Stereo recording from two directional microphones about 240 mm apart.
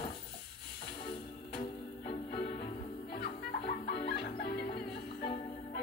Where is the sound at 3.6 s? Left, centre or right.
Left.